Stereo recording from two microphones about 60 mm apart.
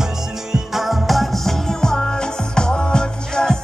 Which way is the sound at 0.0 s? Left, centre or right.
Centre.